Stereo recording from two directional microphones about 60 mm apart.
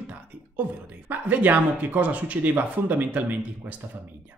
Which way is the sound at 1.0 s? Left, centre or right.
Right.